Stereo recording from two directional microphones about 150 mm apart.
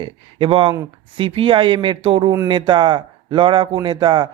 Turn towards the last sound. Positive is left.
turn(degrees=-30)  # may be behind; listen again after turning